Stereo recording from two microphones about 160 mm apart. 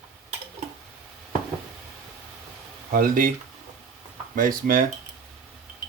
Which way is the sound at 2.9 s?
60° right (ahead or behind).